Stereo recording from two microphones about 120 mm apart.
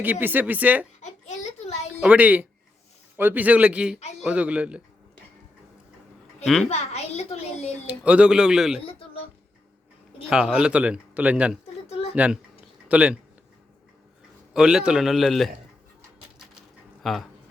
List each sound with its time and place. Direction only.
0.0 s speech: 15° right (ahead or behind)
1.0 s a sound: 80° left
2.0 s speech: 10° right (ahead or behind)
6.4 s a child's voice: centre (ahead or behind)
6.7 s a child's voice: 65° left (ahead or behind)
7.9 s speech: 10° right (ahead or behind)
8.9 s a sound: 55° left (ahead or behind)
10.2 s speech: 5° right (ahead or behind)
11.9 s a sound: 55° left (ahead or behind)
12.1 s speech: 10° right (ahead or behind)
14.5 s a man's voice: 5° right (ahead or behind)
17.0 s speech: centre (ahead or behind)